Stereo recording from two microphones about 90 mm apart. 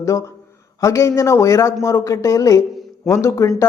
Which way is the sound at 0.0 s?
35° left (ahead or behind).